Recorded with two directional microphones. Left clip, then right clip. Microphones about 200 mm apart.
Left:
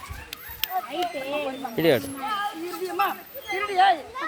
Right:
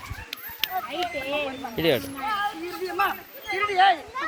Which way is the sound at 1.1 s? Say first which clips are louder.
Right 1 dB; 5° right (ahead or behind).